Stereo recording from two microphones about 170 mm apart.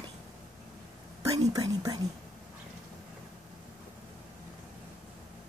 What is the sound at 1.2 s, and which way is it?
Speech, 20° right (ahead or behind).